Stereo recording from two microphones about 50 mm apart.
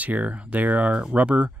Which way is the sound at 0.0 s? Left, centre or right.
Right.